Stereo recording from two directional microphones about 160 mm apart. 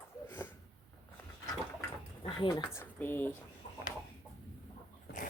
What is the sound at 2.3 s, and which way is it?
Speech, 30° left (ahead or behind).